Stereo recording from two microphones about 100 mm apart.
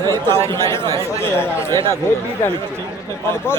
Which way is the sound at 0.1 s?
25° left (ahead or behind).